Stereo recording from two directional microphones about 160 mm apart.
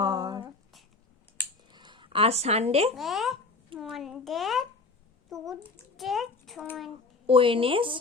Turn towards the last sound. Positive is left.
turn(degrees=-35)  # may be behind; listen again after turning